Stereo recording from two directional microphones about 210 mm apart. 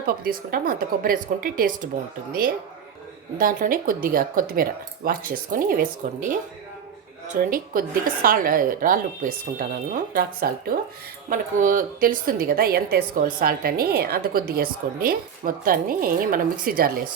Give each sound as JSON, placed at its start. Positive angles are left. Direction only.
{"t": 0.0, "sound": "a woman's voice", "side_deg": -45}
{"t": 3.3, "sound": "a woman's voice", "side_deg": -40}
{"t": 7.3, "sound": "a woman's voice", "side_deg": -40}